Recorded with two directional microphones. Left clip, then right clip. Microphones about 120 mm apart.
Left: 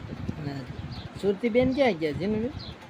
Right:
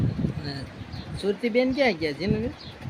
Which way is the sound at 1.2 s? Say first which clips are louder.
Even; 20° left (ahead or behind).